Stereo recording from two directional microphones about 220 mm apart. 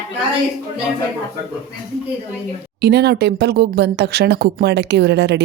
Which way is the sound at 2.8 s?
45° right (ahead or behind).